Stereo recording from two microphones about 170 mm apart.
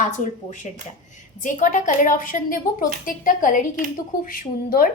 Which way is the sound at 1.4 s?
50° left (ahead or behind).